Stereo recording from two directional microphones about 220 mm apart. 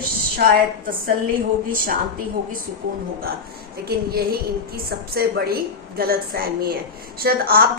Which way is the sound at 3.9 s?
45° right (ahead or behind).